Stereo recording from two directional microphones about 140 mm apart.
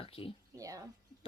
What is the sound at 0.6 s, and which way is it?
Speech, 25° right (ahead or behind).